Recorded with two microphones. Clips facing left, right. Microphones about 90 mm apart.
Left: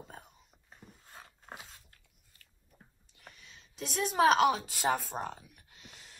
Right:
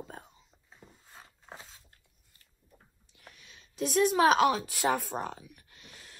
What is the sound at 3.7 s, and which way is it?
A woman's voice, 60° right (ahead or behind).